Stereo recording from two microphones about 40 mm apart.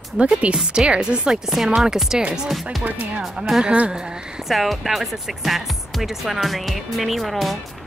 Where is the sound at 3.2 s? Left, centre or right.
Centre.